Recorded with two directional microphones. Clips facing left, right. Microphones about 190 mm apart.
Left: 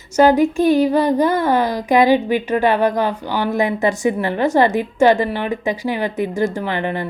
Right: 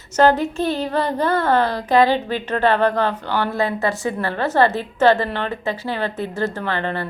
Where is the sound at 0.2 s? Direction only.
10° left (ahead or behind).